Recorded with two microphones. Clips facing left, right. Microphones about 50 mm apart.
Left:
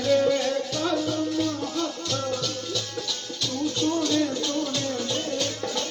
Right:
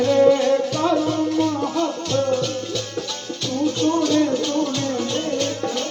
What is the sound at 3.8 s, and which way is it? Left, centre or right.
Music, right.